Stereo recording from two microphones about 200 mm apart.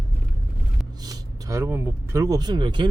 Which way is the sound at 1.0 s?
20° right (ahead or behind).